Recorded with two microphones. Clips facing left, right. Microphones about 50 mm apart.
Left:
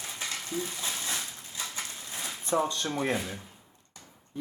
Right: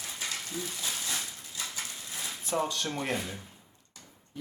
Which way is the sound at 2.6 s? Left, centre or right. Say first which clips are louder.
Left 3 dB; left.